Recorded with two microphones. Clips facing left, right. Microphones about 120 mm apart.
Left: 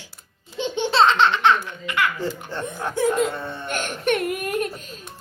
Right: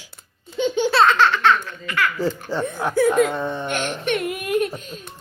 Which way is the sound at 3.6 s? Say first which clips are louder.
Even; 45° left (ahead or behind).